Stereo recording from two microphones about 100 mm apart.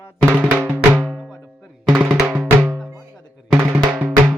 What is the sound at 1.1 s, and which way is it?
Speech, 5° right (ahead or behind).